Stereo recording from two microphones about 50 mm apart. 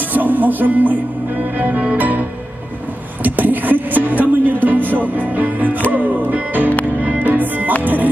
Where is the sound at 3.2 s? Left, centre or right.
Right.